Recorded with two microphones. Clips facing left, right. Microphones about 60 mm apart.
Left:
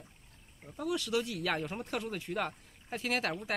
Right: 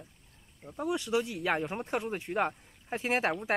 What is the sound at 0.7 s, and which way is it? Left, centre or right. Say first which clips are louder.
Speech: right 3 dB; right.